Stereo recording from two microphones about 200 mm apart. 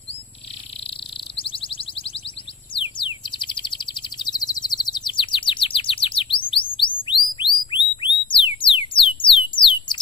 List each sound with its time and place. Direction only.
0.8 s a sound: 25° left (ahead or behind)
2.7 s bird: 25° left (ahead or behind)
8.3 s music: 25° left (ahead or behind)